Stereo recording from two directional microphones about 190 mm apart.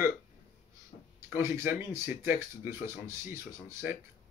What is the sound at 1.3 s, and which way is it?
Speech, 15° right (ahead or behind).